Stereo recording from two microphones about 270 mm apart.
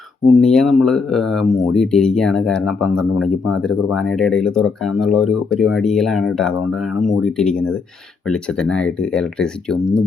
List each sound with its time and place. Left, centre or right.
0.3 s speech: centre